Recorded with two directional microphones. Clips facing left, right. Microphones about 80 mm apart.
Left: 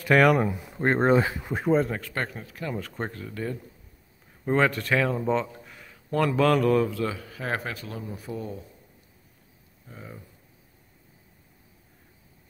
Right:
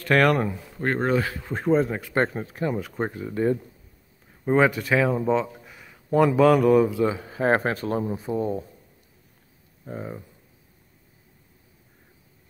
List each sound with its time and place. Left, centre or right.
0.0 s speech: centre
0.5 s speech: centre
1.5 s speech: centre
2.1 s speech: right
2.8 s speech: centre
4.5 s speech: centre; by 8.6 s right
9.9 s speech: right